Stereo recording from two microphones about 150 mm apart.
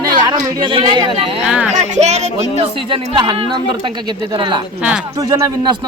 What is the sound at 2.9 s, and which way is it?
Speech, 35° right (ahead or behind).